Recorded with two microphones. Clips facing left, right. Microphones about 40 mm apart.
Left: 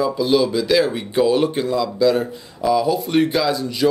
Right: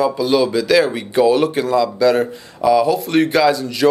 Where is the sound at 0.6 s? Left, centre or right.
Centre.